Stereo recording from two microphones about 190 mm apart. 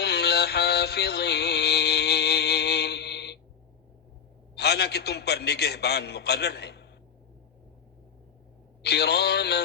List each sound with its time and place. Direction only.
0.0 s music: 60° left (ahead or behind)
4.5 s a man's voice: 60° left (ahead or behind)
8.8 s a man's voice: 60° left (ahead or behind)